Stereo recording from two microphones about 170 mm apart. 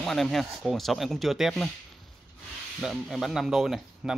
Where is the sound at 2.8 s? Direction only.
Centre (ahead or behind).